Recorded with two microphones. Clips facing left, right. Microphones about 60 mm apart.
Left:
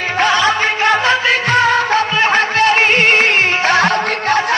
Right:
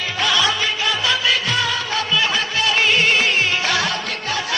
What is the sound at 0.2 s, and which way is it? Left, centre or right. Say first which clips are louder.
Music: left 6 dB; left.